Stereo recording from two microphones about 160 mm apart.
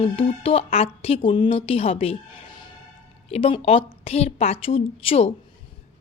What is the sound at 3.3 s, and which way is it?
A woman's voice, 35° left (ahead or behind).